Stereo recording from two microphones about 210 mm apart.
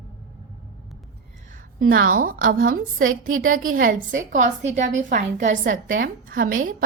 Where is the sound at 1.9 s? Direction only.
40° right (ahead or behind).